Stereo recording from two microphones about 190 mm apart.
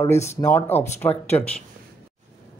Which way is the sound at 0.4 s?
10° left (ahead or behind).